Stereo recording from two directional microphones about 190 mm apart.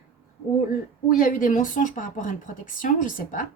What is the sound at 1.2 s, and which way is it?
A woman's voice, 45° left (ahead or behind).